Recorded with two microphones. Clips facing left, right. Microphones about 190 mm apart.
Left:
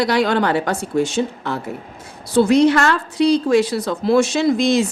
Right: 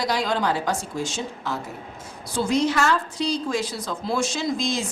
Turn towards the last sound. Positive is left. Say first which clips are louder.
# left 10 dB
turn(degrees=65)  # may be behind; listen again after turning